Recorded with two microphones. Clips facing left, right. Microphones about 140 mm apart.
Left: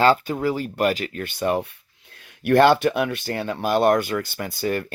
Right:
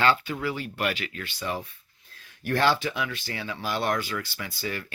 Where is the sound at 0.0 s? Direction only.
40° left (ahead or behind).